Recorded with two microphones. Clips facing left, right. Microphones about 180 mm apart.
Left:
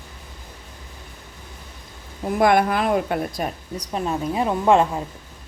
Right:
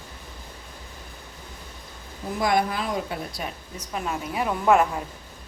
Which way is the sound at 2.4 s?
60° left (ahead or behind).